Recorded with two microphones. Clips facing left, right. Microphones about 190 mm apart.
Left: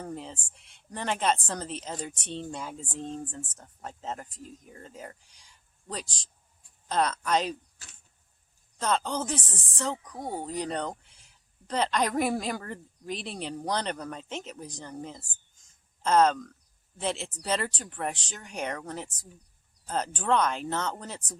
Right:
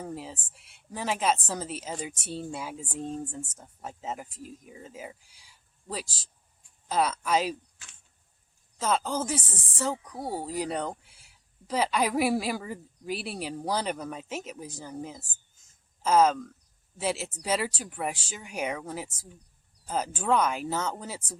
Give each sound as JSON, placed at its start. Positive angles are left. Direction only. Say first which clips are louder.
{"t": 0.0, "sound": "speech", "louder": "even", "side_deg": -5}
{"t": 7.8, "sound": "a sound", "louder": "left 1 dB", "side_deg": 40}
{"t": 8.8, "sound": "speech", "louder": "right 1 dB", "side_deg": -5}